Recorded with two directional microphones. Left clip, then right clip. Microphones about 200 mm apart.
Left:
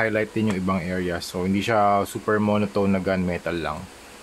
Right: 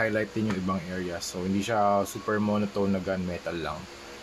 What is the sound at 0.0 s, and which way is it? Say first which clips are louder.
Speech: left 4 dB; 25° left (ahead or behind).